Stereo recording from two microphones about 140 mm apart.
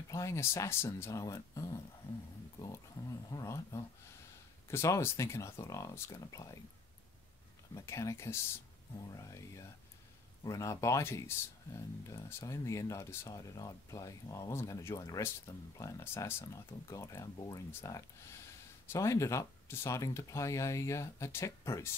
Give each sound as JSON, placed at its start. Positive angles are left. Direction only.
{"t": 0.1, "sound": "speech", "side_deg": 20}
{"t": 7.7, "sound": "speech", "side_deg": 20}